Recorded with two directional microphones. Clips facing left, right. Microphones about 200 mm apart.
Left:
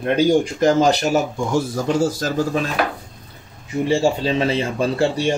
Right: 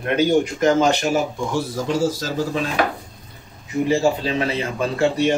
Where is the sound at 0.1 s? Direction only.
35° left (ahead or behind).